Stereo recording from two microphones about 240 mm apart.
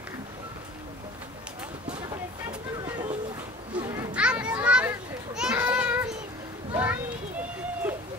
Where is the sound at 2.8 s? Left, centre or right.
Centre.